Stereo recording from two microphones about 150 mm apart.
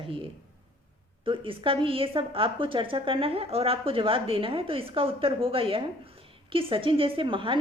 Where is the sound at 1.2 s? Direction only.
35° right (ahead or behind).